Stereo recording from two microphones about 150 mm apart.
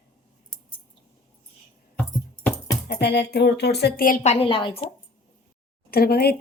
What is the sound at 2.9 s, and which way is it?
A woman's voice, 90° left.